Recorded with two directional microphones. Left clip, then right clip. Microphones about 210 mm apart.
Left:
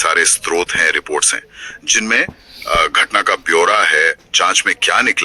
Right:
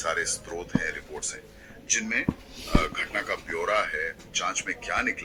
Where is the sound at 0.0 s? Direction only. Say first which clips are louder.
Left 15 dB; 50° left (ahead or behind).